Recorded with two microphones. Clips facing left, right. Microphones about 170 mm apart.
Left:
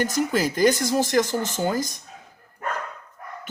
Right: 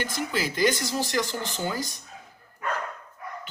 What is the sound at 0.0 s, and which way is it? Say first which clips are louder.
Speech: left 7 dB; 45° left (ahead or behind).